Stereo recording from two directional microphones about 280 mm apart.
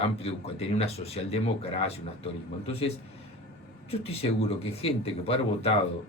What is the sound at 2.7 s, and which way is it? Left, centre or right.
A man's voice, left.